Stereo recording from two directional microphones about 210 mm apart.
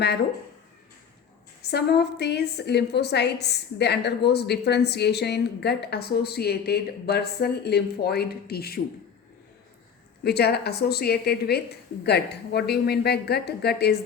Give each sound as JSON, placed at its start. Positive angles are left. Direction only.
{"t": 1.6, "sound": "a woman's voice", "side_deg": 50}
{"t": 10.2, "sound": "a woman's voice", "side_deg": 50}